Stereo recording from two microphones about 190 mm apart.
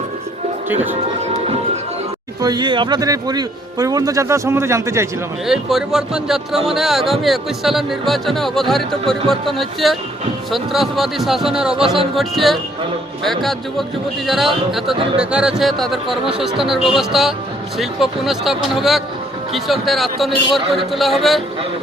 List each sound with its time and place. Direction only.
0.7 s speech: 10° right (ahead or behind)
1.2 s music: 35° right (ahead or behind)
2.4 s a man's voice: 20° right (ahead or behind)
5.5 s speech: centre (ahead or behind)
11.8 s a man's voice: 30° right (ahead or behind)
12.1 s speech: centre (ahead or behind)